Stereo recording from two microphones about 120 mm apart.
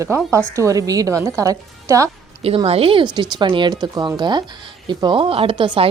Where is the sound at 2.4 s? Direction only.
55° right (ahead or behind).